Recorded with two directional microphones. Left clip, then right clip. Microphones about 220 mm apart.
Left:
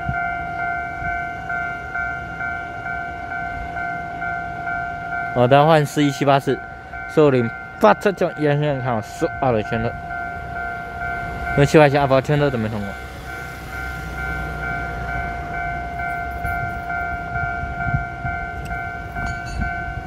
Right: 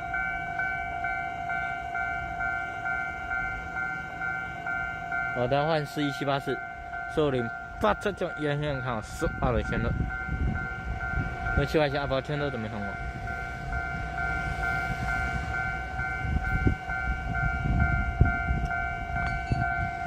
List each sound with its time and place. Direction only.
5.3 s speech: 25° left (ahead or behind); by 9.9 s 5° left (ahead or behind)
11.5 s speech: 25° left (ahead or behind)